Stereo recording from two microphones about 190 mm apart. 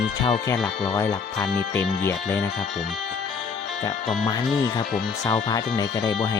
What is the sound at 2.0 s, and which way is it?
Speech, 10° left (ahead or behind).